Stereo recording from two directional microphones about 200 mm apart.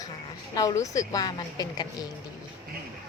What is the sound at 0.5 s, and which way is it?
Speech, 20° left (ahead or behind).